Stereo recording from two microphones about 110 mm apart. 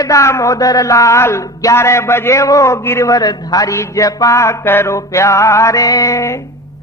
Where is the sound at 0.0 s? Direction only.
30° left (ahead or behind).